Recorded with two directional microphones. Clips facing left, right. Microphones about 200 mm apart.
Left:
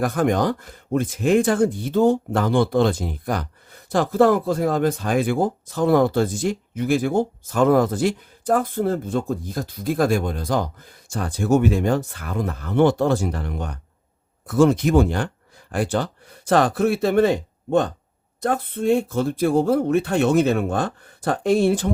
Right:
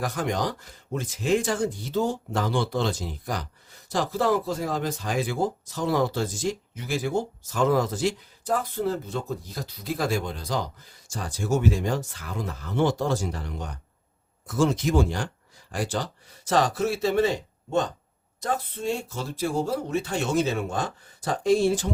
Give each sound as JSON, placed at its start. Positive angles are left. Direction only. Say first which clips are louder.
{"t": 0.0, "sound": "speech", "louder": "left 7 dB", "side_deg": 55}